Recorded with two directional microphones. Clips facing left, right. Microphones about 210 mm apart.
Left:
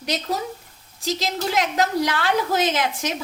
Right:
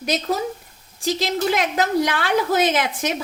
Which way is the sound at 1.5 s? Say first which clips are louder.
Right 1 dB; 55° right (ahead or behind).